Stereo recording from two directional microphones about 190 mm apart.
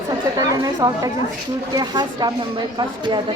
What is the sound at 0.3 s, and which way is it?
Speech, 20° right (ahead or behind).